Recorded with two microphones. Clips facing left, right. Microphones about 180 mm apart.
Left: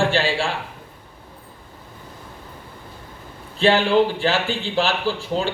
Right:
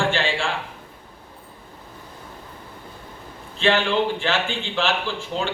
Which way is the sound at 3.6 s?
35° left (ahead or behind).